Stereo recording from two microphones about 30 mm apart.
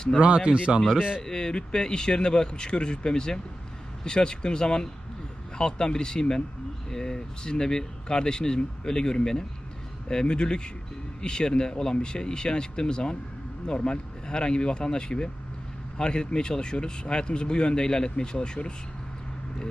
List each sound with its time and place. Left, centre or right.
0.2 s speech: right
1.2 s speech: left